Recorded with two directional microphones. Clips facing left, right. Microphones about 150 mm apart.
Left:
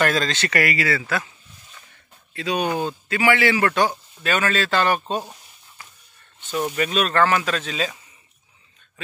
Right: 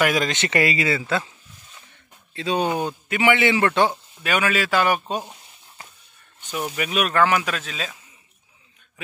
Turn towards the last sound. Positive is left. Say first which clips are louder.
# left 4 dB
turn(degrees=0)  # may be behind; listen again after turning